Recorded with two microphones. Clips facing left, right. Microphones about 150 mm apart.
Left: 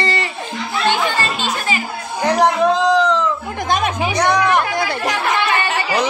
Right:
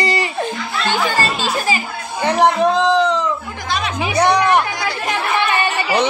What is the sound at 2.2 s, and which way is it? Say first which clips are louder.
Speech: even; centre (ahead or behind).